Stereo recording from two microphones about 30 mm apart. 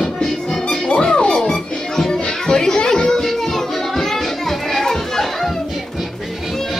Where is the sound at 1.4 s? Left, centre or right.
Centre.